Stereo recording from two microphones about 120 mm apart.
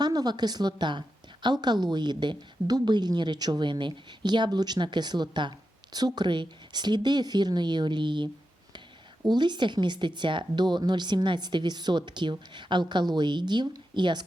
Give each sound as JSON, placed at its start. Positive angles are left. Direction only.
{"t": 0.0, "sound": "a woman's voice", "side_deg": -35}